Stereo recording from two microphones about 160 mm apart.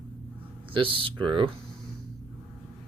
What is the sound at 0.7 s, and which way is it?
Speech, 35° right (ahead or behind).